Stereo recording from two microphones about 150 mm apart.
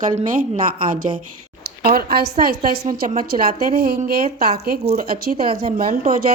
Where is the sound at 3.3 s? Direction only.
80° right.